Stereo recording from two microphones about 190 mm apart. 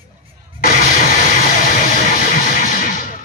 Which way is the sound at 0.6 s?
45° left (ahead or behind).